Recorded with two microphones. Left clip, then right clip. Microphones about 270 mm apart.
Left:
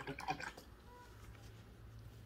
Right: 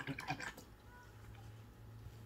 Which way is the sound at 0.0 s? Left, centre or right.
Right.